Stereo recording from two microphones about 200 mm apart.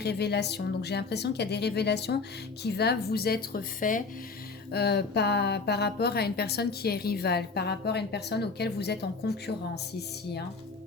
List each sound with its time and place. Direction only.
0.0 s a woman's voice: 55° left (ahead or behind)
4.7 s a woman's voice: 55° left (ahead or behind)